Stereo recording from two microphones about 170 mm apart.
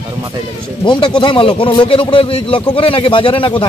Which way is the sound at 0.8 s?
25° left (ahead or behind).